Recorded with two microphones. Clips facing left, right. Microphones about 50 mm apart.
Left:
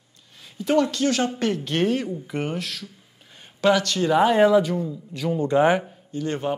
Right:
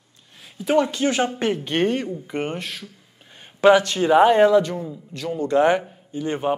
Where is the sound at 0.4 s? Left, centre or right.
Centre.